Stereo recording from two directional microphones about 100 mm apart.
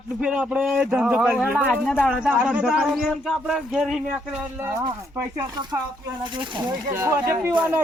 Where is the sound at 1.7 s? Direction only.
10° left (ahead or behind).